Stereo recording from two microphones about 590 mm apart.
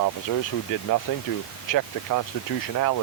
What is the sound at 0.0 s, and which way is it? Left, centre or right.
Speech, left.